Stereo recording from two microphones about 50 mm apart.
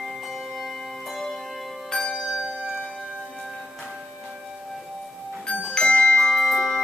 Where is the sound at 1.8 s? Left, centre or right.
Centre.